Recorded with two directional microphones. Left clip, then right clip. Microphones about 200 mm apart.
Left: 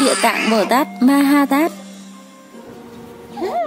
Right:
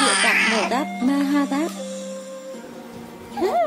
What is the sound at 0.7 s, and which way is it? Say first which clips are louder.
Speech: left 7 dB; 40° left (ahead or behind).